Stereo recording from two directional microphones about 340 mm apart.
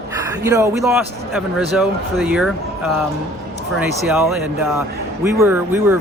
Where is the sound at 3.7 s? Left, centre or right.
Centre.